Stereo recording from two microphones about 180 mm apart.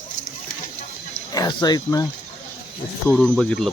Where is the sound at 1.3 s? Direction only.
20° left (ahead or behind).